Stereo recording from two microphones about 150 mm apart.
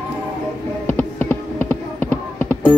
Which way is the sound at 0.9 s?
10° left (ahead or behind).